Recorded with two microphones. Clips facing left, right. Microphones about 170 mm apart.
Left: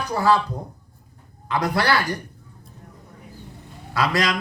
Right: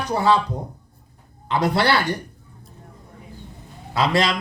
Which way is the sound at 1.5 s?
30° right (ahead or behind).